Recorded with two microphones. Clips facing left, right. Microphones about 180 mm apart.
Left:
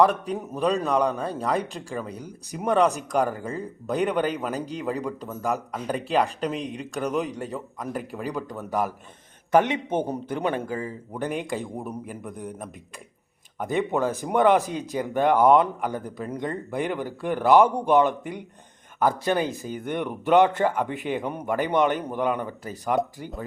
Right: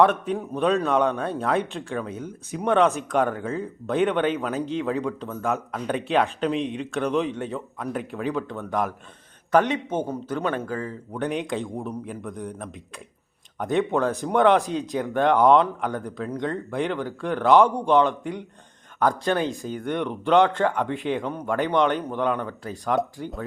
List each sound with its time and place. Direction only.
0.0 s speech: centre (ahead or behind)
11.2 s speech: centre (ahead or behind)